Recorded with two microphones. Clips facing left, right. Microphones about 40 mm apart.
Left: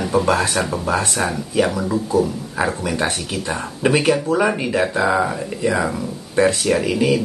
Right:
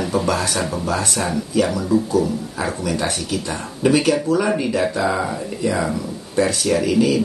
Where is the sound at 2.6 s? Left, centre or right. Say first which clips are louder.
Left 3 dB; left.